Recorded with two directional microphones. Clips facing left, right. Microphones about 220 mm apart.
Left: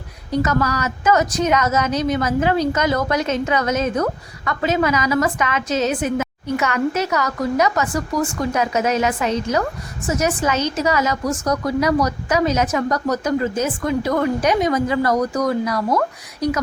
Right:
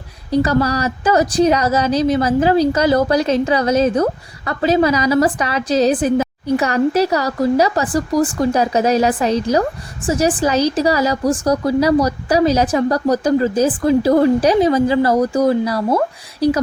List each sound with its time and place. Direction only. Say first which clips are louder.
0.3 s a woman's voice: right 4 dB; 30° right (ahead or behind)